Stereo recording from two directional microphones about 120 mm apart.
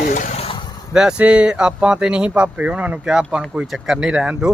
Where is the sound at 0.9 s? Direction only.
5° right (ahead or behind).